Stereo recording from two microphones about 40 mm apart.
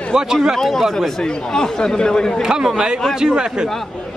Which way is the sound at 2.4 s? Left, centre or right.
Centre.